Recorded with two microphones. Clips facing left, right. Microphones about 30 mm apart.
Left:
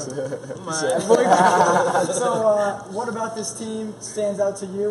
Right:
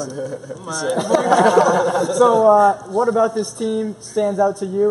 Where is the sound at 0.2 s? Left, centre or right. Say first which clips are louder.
Right 1 dB; centre.